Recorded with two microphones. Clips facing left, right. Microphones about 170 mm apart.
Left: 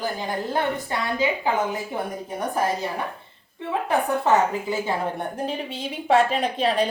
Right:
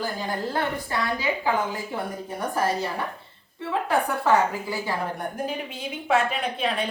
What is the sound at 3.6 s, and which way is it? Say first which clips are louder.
A woman's voice: left 1 dB; 20° left (ahead or behind).